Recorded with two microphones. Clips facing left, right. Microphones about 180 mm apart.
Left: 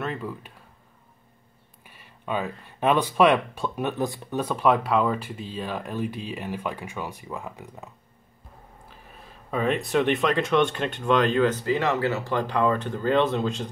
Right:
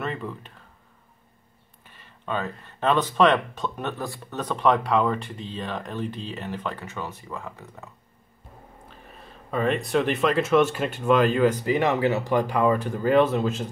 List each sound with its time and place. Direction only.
0.0 s a sound: centre (ahead or behind)
1.9 s speech: 10° left (ahead or behind)
8.9 s speech: centre (ahead or behind)